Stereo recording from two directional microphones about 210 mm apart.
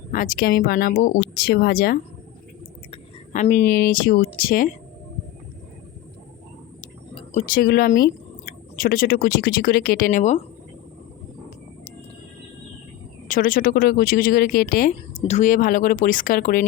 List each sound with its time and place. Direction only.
0.1 s speech: 40° left (ahead or behind)
2.9 s a sound: 35° left (ahead or behind)
3.7 s speech: 45° left (ahead or behind)
7.3 s speech: 40° left (ahead or behind)
13.2 s speech: 40° left (ahead or behind)
15.2 s speech: 35° left (ahead or behind)